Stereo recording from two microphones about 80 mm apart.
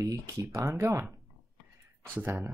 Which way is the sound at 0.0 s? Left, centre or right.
Right.